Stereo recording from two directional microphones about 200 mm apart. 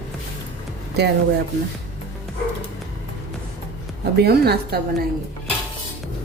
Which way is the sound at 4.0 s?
55° right (ahead or behind).